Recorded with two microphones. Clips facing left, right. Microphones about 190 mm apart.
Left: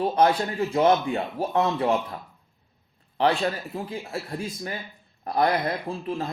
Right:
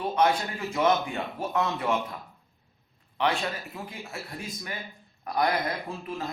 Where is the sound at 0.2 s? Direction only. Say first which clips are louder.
Left 3 dB; 35° left (ahead or behind).